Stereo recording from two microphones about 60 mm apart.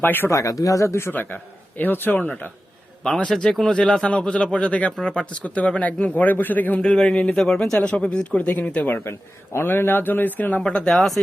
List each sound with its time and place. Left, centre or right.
0.0 s speech: left
0.3 s speech: left
1.1 s speech: left
3.0 s speech: centre
3.5 s speech: centre
3.8 s speech: centre
9.0 s speech: left
10.8 s speech: centre